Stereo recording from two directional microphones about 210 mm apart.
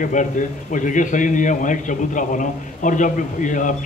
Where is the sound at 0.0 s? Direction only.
35° left (ahead or behind).